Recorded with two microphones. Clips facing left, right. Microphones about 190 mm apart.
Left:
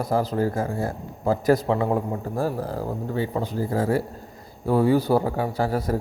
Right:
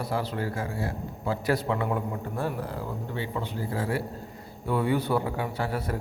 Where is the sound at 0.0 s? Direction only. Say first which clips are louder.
Left 7 dB; 45° left (ahead or behind).